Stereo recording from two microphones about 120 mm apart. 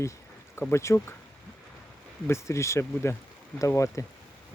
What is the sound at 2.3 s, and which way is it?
Speech, 25° left (ahead or behind).